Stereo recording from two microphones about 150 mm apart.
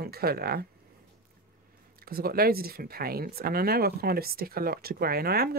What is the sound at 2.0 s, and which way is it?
Speech, 85° right.